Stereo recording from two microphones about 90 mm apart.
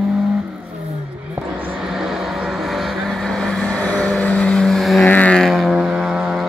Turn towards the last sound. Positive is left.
turn(degrees=-5)  # may be behind; listen again after turning